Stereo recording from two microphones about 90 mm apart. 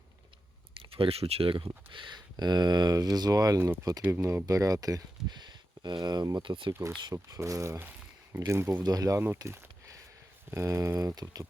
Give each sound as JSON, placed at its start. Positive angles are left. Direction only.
{"t": 0.8, "sound": "speech", "side_deg": -90}
{"t": 4.1, "sound": "speech", "side_deg": -30}
{"t": 6.4, "sound": "speech", "side_deg": -60}
{"t": 7.1, "sound": "speech", "side_deg": -35}
{"t": 8.7, "sound": "speech", "side_deg": -45}
{"t": 9.2, "sound": "a sound", "side_deg": -25}
{"t": 10.5, "sound": "speech", "side_deg": -30}